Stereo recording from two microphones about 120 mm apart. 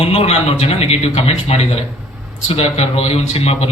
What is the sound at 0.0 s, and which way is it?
A man's voice, 55° left (ahead or behind).